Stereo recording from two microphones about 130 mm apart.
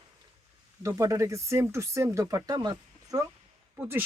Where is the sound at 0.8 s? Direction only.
25° right (ahead or behind).